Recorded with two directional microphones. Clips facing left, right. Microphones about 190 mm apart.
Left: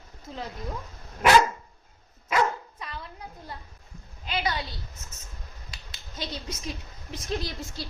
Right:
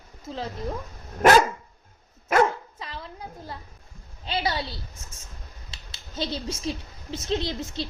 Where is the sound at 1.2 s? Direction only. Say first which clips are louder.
Right 3 dB; 45° right (ahead or behind).